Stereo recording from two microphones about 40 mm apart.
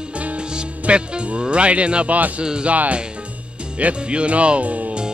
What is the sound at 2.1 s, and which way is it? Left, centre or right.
Speech, right.